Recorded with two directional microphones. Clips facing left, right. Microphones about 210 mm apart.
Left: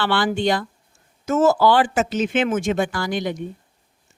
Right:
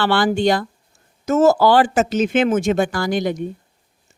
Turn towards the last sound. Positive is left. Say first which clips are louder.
# right 4 dB
turn(degrees=-40)  # may be behind; listen again after turning